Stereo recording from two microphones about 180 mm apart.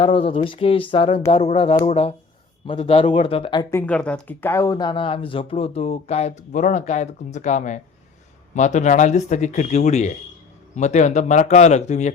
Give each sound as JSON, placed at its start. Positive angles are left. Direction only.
{"t": 0.0, "sound": "speech", "side_deg": 30}
{"t": 3.7, "sound": "speech", "side_deg": 10}